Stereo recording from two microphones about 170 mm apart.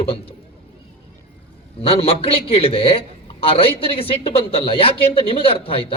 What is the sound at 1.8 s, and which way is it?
A man's voice, 35° left (ahead or behind).